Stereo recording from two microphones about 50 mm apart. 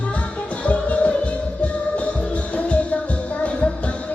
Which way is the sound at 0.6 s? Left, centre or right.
Left.